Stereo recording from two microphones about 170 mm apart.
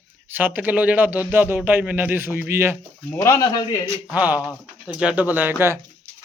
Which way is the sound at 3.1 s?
15° left (ahead or behind).